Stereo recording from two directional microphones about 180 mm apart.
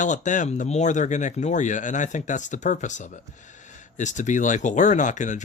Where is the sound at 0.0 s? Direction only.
45° left (ahead or behind).